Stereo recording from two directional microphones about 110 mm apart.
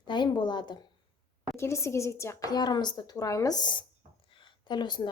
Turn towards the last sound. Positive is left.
turn(degrees=45)  # may be behind; listen again after turning